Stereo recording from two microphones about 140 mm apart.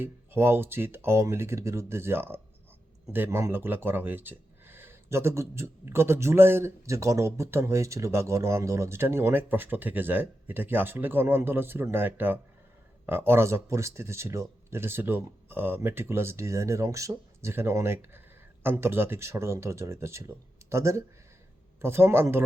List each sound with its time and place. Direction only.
0.0 s speech: 15° right (ahead or behind)